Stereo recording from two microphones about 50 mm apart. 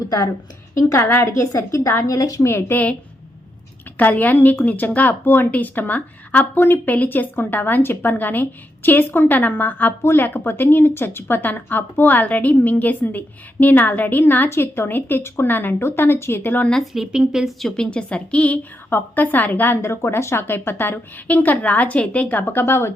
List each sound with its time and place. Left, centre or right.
1.1 s a woman's voice: left
2.0 s a woman's voice: left
3.9 s a woman's voice: left
10.0 s a woman's voice: left
14.5 s speech: left
16.7 s speech: centre
17.6 s a woman's voice: centre
17.9 s speech: left
18.9 s a woman's voice: left
19.8 s a woman's voice: left
20.5 s speech: left
21.2 s a woman's voice: left